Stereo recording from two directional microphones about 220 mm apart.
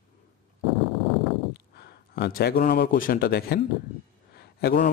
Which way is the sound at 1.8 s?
45° left (ahead or behind).